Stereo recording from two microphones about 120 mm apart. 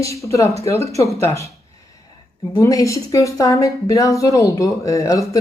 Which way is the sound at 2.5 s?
30° left (ahead or behind).